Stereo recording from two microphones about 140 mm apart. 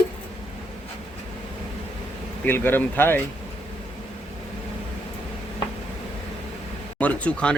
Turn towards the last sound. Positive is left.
turn(degrees=10)  # may be behind; listen again after turning